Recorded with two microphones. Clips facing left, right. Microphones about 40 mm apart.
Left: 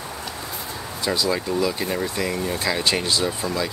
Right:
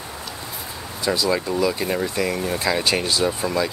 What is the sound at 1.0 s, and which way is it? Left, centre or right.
Speech, centre.